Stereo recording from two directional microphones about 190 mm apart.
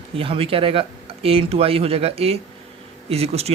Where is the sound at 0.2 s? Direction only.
30° right (ahead or behind).